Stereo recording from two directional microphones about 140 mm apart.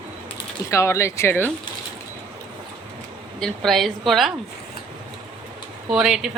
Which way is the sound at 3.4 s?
Centre (ahead or behind).